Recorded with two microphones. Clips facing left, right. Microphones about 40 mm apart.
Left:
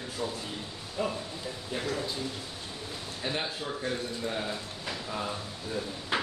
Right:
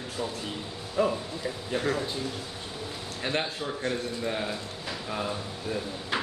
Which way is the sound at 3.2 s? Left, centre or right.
Right.